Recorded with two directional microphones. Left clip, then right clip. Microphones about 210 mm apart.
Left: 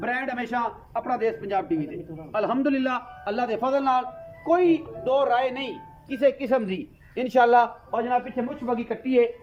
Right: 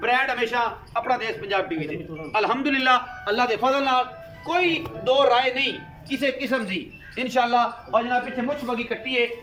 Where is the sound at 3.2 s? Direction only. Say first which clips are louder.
Right 3 dB; 55° left (ahead or behind).